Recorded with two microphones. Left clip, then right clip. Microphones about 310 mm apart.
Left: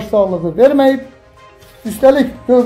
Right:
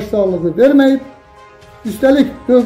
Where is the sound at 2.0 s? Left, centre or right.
Centre.